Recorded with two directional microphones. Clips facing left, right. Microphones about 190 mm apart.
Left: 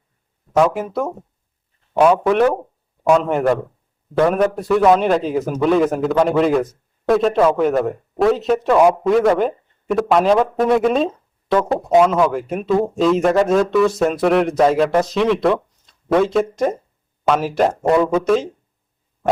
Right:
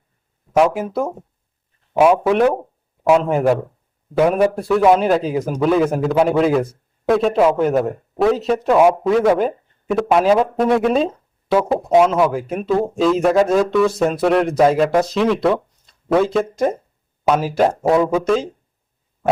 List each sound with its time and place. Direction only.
0.6 s a man's voice: 5° right (ahead or behind)